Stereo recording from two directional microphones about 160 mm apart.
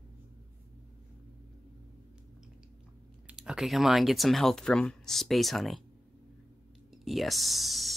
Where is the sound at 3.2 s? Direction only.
5° right (ahead or behind).